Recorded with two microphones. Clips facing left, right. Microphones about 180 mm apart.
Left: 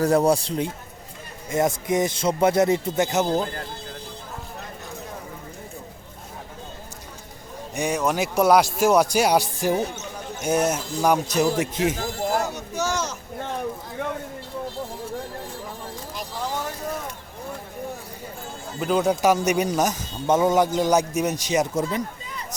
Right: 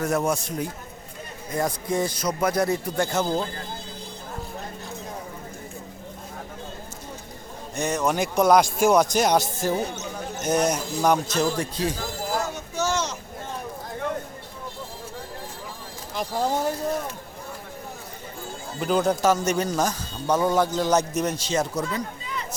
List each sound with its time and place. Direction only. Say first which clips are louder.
0.0 s a man's voice: left 5 dB; 35° left (ahead or behind)
7.8 s a man's voice: left 1 dB; 10° left (ahead or behind)
12.7 s a sound: right 1 dB; 10° left (ahead or behind)
16.1 s speech: right 6 dB; 45° right (ahead or behind)
18.8 s speech: left 1 dB; centre (ahead or behind)
19.2 s a man's voice: left 2 dB; 15° left (ahead or behind)